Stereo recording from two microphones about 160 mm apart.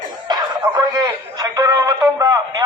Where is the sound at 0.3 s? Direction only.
25° right (ahead or behind).